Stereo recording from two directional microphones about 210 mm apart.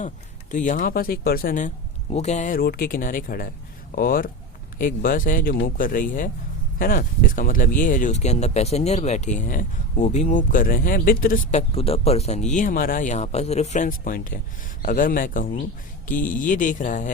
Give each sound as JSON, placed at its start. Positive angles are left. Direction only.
{"t": 0.5, "sound": "speech", "side_deg": 35}
{"t": 11.7, "sound": "speech", "side_deg": 30}